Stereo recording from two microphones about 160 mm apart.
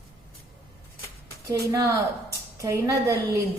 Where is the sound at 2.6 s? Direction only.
20° right (ahead or behind).